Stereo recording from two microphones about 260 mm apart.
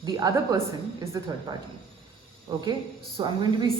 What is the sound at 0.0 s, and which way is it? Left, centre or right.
A woman's voice, centre.